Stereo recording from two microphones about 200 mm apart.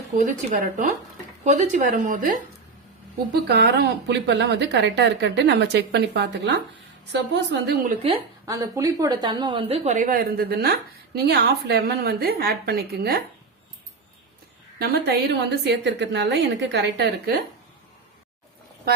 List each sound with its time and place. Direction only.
0.2 s speech: 40° right (ahead or behind)
3.4 s a woman's voice: 55° right (ahead or behind)
8.0 s a woman's voice: 20° right (ahead or behind); by 13.2 s 50° right (ahead or behind)
14.8 s a woman's voice: 55° right (ahead or behind)